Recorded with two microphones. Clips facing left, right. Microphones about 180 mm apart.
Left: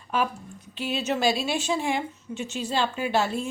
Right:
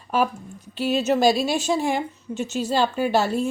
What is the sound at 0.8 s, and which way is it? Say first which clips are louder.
Speech: right 7 dB; 40° right (ahead or behind).